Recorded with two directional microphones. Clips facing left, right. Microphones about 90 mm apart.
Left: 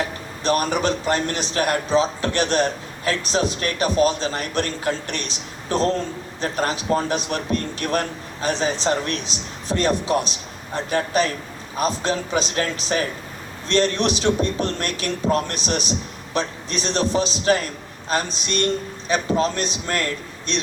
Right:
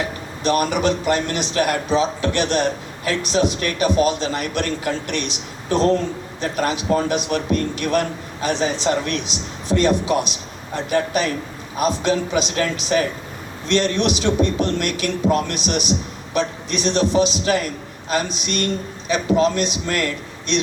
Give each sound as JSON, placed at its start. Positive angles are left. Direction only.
{"t": 0.0, "sound": "a man's voice", "side_deg": 35}